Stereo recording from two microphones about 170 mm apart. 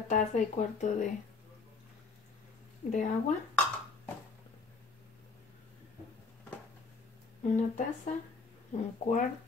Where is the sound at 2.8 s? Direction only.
40° left (ahead or behind).